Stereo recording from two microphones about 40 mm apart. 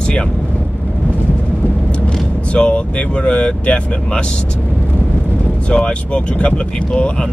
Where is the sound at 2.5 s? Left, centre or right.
Left.